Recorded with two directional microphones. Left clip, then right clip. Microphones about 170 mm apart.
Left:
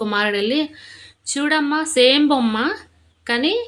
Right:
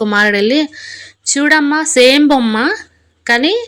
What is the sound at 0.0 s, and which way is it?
Speech, 40° right (ahead or behind).